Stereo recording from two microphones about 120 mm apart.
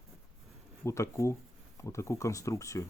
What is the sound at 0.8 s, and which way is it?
Speech, 25° left (ahead or behind).